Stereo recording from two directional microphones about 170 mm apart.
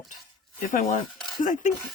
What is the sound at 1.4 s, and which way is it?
Speech, 50° left (ahead or behind).